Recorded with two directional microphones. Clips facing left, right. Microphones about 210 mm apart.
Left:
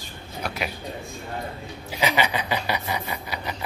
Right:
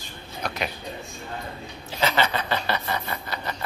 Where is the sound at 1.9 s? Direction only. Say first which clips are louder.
Even; 10° left (ahead or behind).